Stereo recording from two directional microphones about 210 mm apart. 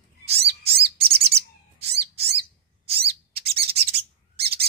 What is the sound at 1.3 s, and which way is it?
Bird, 50° right (ahead or behind).